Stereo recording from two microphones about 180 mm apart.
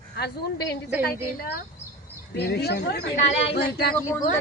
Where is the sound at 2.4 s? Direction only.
65° left (ahead or behind).